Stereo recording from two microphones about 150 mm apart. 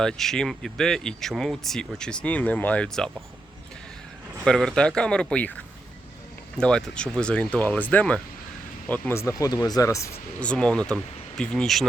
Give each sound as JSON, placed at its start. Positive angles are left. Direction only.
{"t": 0.0, "sound": "speech", "side_deg": 5}
{"t": 4.4, "sound": "speech", "side_deg": 5}
{"t": 10.4, "sound": "speech", "side_deg": 5}